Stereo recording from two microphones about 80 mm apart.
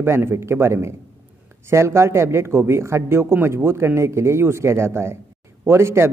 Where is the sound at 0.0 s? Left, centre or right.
Right.